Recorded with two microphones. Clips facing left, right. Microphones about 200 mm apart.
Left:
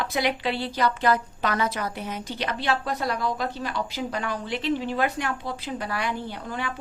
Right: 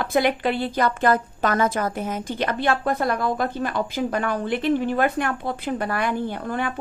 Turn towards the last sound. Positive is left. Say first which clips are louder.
# right 6 dB
turn(degrees=-50)  # may be behind; listen again after turning